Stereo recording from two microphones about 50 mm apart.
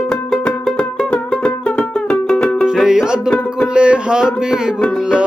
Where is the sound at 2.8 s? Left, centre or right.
Centre.